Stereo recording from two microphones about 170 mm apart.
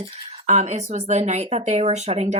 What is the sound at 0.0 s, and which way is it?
Speech, 40° right (ahead or behind).